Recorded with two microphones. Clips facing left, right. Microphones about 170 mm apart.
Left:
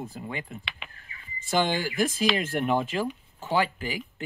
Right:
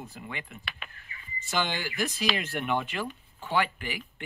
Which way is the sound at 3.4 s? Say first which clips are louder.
Left 3 dB; 35° left (ahead or behind).